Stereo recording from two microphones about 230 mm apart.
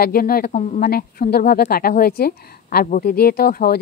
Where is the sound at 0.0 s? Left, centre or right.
Left.